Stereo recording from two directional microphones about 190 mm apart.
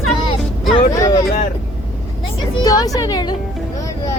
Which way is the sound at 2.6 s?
20° left (ahead or behind).